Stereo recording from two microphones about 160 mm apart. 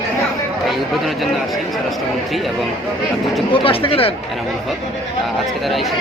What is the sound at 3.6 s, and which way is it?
Speech, 35° left (ahead or behind).